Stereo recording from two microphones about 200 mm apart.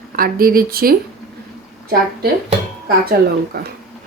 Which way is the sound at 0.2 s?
45° right (ahead or behind).